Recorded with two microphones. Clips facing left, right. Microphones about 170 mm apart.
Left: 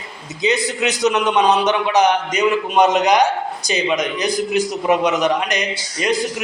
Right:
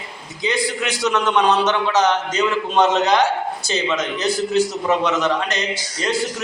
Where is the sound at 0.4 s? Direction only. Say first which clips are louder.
Left 3 dB; 20° left (ahead or behind).